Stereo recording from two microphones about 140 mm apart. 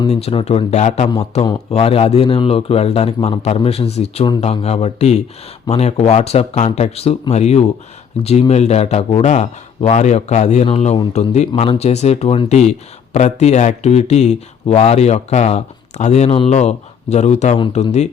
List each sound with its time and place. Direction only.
0.1 s speech: 45° left (ahead or behind)
10.7 s speech: 40° left (ahead or behind)